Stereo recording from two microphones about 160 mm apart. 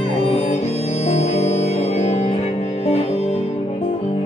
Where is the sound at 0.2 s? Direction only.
40° left (ahead or behind).